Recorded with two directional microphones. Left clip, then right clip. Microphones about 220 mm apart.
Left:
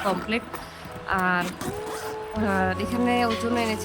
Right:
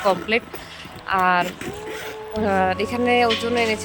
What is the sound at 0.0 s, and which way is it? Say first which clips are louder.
Speech: right 6 dB; 15° right (ahead or behind).